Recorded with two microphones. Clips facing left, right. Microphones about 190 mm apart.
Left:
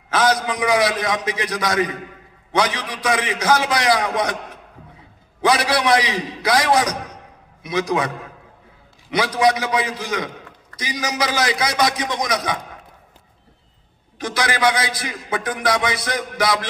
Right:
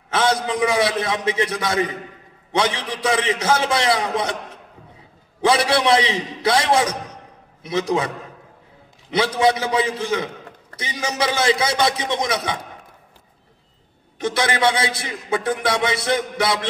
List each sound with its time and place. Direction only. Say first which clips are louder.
0.1 s a man's voice: left 1 dB; 25° right (ahead or behind)
5.4 s a man's voice: right 1 dB; 25° right (ahead or behind)
9.1 s a man's voice: even; 25° right (ahead or behind)
14.2 s a man's voice: right 1 dB; 25° right (ahead or behind)